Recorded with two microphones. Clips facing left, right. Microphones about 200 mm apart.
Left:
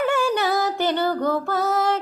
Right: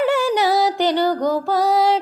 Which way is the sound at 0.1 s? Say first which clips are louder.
Right 4 dB; 15° right (ahead or behind).